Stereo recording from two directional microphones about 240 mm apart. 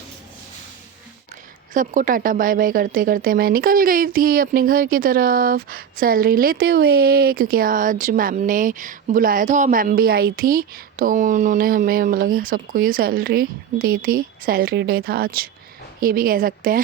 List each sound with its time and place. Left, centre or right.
1.7 s speech: right